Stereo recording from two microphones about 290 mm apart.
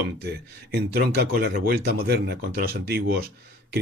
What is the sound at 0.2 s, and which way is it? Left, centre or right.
Speech, right.